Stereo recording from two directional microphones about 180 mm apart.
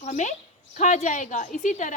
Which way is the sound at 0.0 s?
40° left (ahead or behind).